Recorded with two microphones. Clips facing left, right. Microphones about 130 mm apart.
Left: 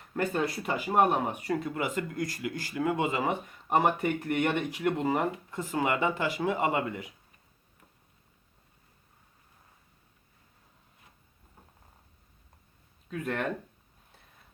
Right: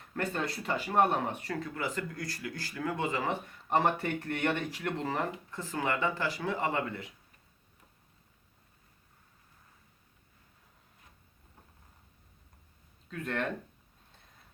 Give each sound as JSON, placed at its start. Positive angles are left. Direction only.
{"t": 0.1, "sound": "speech", "side_deg": 15}
{"t": 13.1, "sound": "speech", "side_deg": 10}